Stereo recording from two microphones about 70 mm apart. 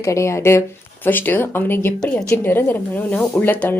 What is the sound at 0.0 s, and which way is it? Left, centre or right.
Speech, left.